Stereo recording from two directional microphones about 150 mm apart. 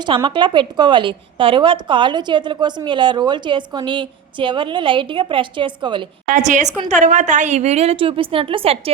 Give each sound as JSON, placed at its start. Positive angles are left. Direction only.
{"t": 0.3, "sound": "a woman's voice", "side_deg": -30}
{"t": 6.2, "sound": "a woman's voice", "side_deg": -55}